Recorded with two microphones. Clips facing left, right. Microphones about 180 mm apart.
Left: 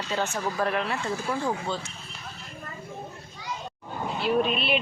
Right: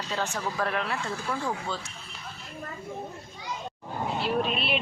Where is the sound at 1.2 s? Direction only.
15° left (ahead or behind).